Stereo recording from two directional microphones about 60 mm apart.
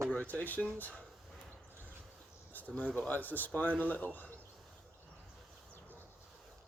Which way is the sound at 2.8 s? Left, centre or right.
Centre.